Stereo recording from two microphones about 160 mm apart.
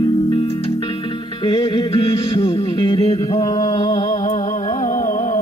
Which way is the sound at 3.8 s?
30° left (ahead or behind).